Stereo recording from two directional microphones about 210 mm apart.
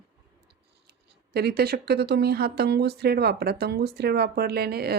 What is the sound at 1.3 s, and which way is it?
Speech, 50° right (ahead or behind).